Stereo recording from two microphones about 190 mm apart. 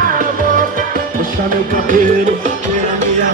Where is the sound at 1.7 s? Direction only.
45° right (ahead or behind).